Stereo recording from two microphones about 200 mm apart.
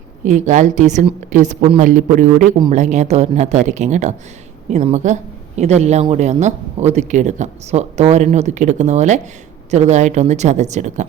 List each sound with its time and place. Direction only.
0.3 s a woman's voice: 35° right (ahead or behind)